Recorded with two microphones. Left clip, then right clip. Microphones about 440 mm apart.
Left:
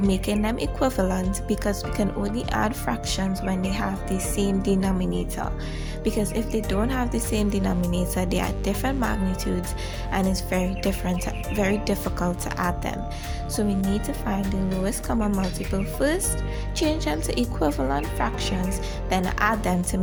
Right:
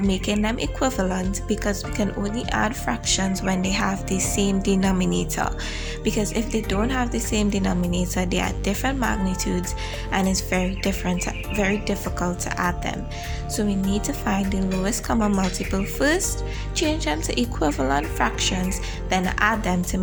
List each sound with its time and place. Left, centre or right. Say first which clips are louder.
0.1 s a woman's voice: right 1 dB; left